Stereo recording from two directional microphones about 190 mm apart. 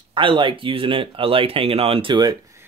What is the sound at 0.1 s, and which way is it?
Speech, 25° right (ahead or behind).